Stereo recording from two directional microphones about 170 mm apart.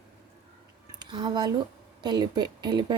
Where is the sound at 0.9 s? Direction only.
25° right (ahead or behind).